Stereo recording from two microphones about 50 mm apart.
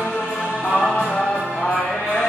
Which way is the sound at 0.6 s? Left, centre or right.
Left.